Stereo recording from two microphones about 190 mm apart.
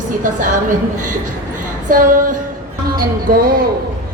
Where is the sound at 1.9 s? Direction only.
45° right (ahead or behind).